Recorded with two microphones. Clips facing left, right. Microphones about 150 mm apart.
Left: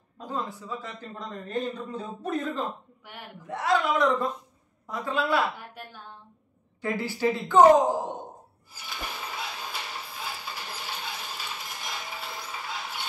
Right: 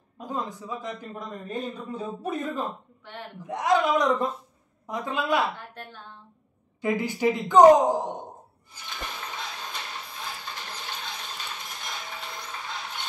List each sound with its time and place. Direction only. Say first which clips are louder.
0.2 s a man's voice: right 1 dB; 15° right (ahead or behind)
3.1 s a woman's voice: right 4 dB; 10° left (ahead or behind)
3.4 s a man's voice: right 2 dB; 15° right (ahead or behind)
5.8 s a woman's voice: right 1 dB; 10° left (ahead or behind)
6.8 s a man's voice: right 2 dB; 15° right (ahead or behind)
8.7 s a sound: even; 5° left (ahead or behind)